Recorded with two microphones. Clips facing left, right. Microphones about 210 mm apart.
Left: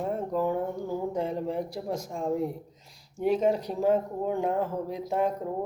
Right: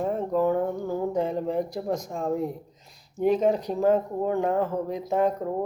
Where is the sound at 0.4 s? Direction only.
55° right (ahead or behind).